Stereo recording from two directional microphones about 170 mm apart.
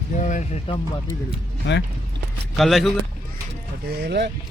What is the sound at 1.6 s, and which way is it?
Speech, 90° left.